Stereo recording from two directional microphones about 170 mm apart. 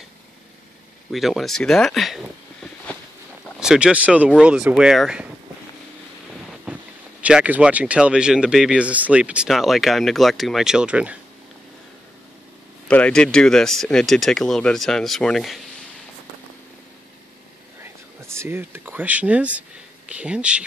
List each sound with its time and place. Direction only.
1.1 s speech: centre (ahead or behind)
3.5 s speech: 5° right (ahead or behind)
6.6 s speech: 5° right (ahead or behind)
12.8 s speech: 5° left (ahead or behind)
17.8 s speech: 15° right (ahead or behind)